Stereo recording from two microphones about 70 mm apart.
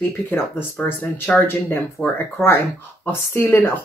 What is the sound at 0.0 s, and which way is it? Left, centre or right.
Speech, left.